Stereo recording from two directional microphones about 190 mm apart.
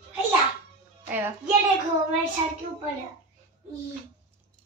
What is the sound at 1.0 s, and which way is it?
Music, 10° right (ahead or behind).